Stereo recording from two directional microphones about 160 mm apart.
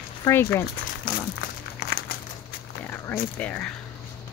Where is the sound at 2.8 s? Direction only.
15° left (ahead or behind).